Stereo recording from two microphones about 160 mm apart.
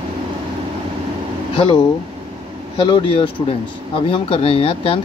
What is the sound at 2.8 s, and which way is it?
Speech, 30° left (ahead or behind).